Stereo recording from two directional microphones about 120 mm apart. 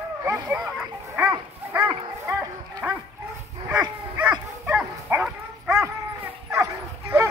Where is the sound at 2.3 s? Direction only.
30° right (ahead or behind).